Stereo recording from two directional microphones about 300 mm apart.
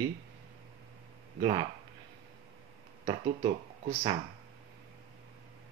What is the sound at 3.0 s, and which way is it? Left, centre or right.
Speech, right.